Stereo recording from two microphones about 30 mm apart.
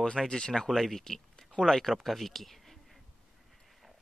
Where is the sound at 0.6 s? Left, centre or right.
Centre.